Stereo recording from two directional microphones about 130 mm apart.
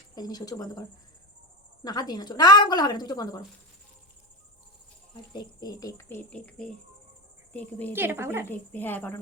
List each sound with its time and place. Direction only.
0.2 s a woman's voice: 30° left (ahead or behind)
5.3 s speech: 35° left (ahead or behind); by 7.9 s 15° left (ahead or behind)
7.9 s a woman's voice: 15° right (ahead or behind)
8.4 s speech: 15° left (ahead or behind)